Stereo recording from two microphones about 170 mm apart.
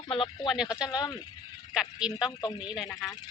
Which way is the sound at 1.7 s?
5° right (ahead or behind).